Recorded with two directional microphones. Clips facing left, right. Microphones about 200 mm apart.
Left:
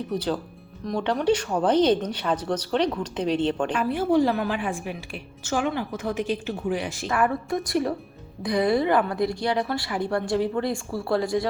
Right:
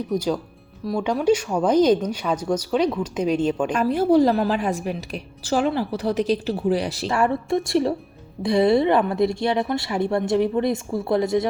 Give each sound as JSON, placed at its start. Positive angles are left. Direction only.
{"t": 0.1, "sound": "a woman's voice", "side_deg": -10}
{"t": 3.8, "sound": "a woman's voice", "side_deg": -40}